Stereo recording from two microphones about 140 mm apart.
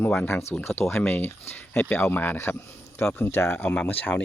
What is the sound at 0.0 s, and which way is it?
Speech, 15° left (ahead or behind).